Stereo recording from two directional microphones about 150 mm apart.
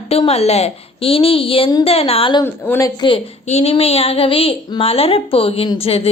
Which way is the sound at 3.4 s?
45° left (ahead or behind).